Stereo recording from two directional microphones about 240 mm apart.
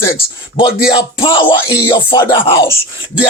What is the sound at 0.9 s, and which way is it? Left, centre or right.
Music, left.